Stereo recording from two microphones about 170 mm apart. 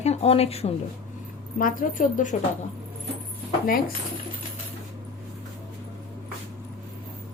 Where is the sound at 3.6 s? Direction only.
60° left (ahead or behind).